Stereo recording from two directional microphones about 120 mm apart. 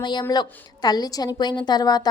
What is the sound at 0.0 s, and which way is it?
A woman's voice, 40° left (ahead or behind).